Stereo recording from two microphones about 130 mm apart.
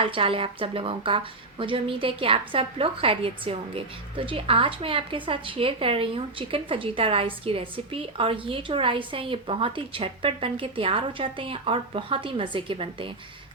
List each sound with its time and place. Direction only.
0.0 s a woman's voice: 45° right (ahead or behind)